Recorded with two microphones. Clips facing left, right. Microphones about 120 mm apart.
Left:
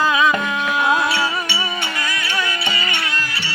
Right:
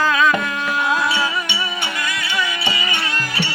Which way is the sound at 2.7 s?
15° right (ahead or behind).